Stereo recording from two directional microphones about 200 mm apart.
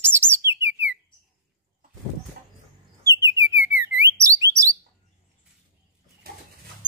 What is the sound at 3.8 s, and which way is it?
Alarm, 10° right (ahead or behind).